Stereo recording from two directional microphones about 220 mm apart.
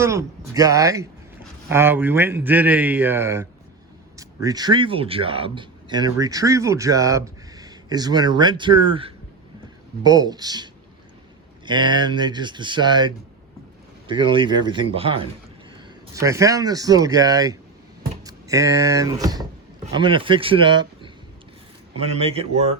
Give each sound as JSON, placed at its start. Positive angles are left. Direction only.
{"t": 0.0, "sound": "speech", "side_deg": -15}
{"t": 16.1, "sound": "speech", "side_deg": -15}